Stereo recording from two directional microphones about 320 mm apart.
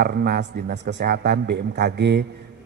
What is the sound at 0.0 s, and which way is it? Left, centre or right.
A man's voice, right.